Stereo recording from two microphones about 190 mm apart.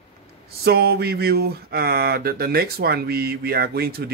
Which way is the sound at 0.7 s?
55° right (ahead or behind).